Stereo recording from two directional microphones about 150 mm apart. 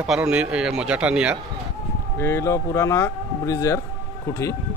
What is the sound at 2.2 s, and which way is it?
Speech, 20° left (ahead or behind).